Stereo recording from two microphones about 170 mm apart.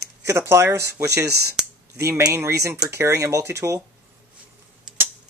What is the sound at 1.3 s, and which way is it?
Speech, 70° right (ahead or behind).